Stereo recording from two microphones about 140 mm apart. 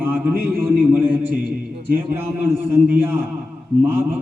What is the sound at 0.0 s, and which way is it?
A man's voice, 15° right (ahead or behind).